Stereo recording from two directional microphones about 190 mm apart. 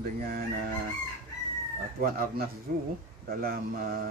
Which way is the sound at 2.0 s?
50° right (ahead or behind).